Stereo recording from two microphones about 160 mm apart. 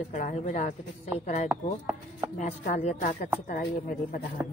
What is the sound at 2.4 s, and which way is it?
Speech, 45° left (ahead or behind).